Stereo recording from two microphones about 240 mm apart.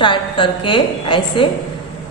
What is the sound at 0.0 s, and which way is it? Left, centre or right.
A woman's voice, left.